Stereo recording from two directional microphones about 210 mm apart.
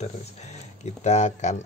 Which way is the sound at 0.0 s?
30° left (ahead or behind).